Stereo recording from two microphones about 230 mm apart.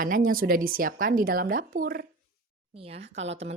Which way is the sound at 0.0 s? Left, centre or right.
Right.